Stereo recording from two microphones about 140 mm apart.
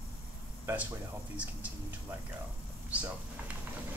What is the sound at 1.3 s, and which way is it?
Speech, 10° right (ahead or behind).